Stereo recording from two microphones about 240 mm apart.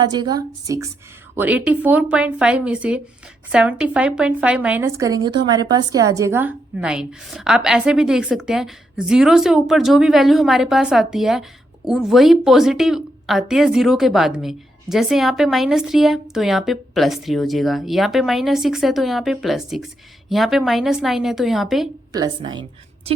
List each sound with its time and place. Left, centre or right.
0.0 s a woman's voice: centre
22.1 s a woman's voice: centre